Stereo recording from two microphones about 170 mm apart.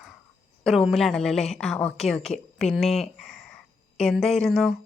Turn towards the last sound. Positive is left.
turn(degrees=0)  # may be behind; listen again after turning